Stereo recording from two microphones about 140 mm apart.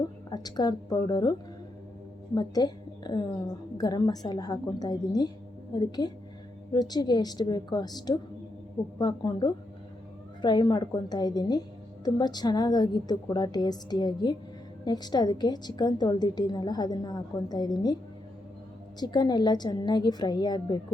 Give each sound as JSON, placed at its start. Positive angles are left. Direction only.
{"t": 0.3, "sound": "a woman's voice", "side_deg": 30}
{"t": 18.9, "sound": "a woman's voice", "side_deg": 30}